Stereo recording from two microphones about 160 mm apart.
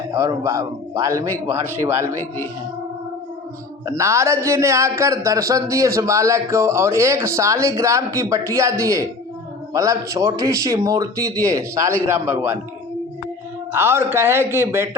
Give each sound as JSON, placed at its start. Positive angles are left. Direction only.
{"t": 0.1, "sound": "a man's voice", "side_deg": -20}
{"t": 3.8, "sound": "a man's voice", "side_deg": -20}
{"t": 13.7, "sound": "a man's voice", "side_deg": -15}